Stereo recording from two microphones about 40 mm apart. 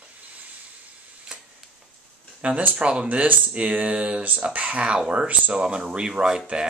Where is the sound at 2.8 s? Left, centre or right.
Right.